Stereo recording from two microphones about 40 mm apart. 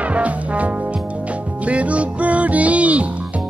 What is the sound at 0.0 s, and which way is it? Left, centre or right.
Music, right.